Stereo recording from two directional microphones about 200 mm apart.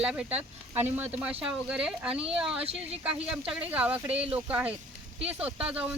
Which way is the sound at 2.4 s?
5° right (ahead or behind).